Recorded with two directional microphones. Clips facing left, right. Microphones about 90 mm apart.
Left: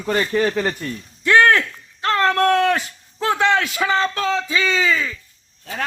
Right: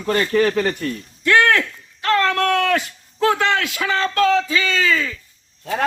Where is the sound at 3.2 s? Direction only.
25° left (ahead or behind).